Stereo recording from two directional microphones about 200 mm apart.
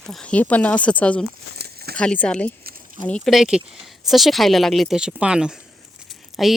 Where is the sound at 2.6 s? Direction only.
45° right (ahead or behind).